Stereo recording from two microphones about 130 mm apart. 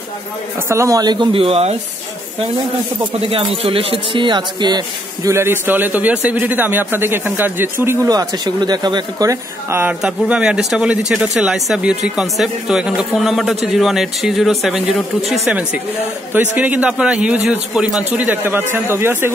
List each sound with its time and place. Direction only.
0.7 s speech: 25° right (ahead or behind); by 1.8 s 50° right (ahead or behind)
3.3 s speech: 45° right (ahead or behind)
5.3 s a man's voice: 15° right (ahead or behind)